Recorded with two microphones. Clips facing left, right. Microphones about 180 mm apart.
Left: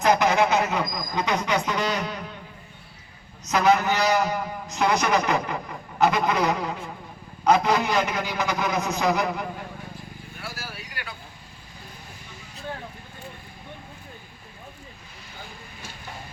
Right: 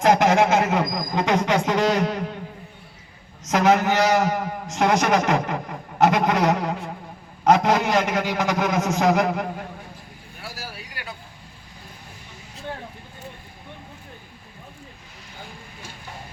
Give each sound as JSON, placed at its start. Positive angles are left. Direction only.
{"t": 0.0, "sound": "music", "side_deg": -90}
{"t": 3.4, "sound": "a sound", "side_deg": -90}
{"t": 7.4, "sound": "a man's voice", "side_deg": -85}